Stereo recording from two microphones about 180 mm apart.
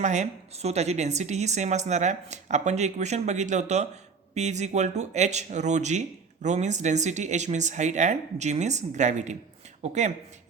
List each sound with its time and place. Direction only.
0.0 s speech: 40° right (ahead or behind)